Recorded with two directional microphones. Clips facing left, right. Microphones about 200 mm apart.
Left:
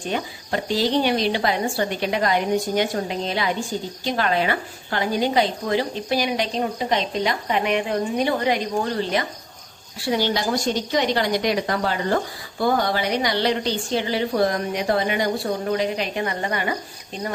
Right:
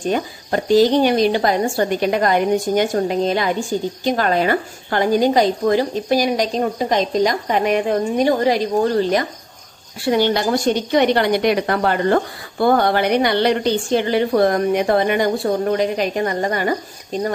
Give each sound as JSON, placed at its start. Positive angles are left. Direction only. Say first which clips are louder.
{"t": 0.0, "sound": "a woman's voice", "louder": "right 6 dB", "side_deg": -45}
{"t": 10.0, "sound": "a woman's voice", "louder": "right 5 dB", "side_deg": -55}